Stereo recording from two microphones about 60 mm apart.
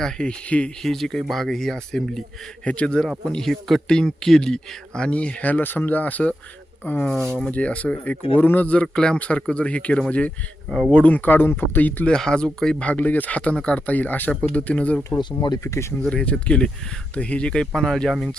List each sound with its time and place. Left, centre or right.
0.0 s speech: centre
0.8 s speech: centre
2.6 s speech: centre
3.2 s speech: centre; by 7.0 s left
7.5 s speech: left
12.0 s speech: centre
12.9 s speech: left
15.6 s speech: left
16.0 s speech: centre
17.7 s speech: centre